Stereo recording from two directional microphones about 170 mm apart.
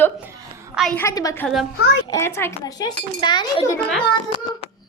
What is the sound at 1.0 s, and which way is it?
A woman's voice, 20° left (ahead or behind).